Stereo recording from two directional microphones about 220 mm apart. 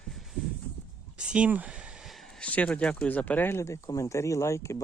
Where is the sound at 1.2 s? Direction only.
5° right (ahead or behind).